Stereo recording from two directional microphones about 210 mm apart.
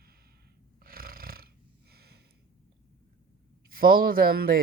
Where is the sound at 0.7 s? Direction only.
45° right (ahead or behind).